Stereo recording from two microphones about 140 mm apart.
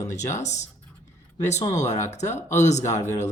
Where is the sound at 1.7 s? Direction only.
55° left (ahead or behind).